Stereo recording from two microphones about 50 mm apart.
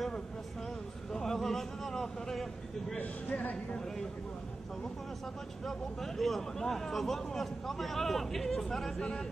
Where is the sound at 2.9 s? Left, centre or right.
Left.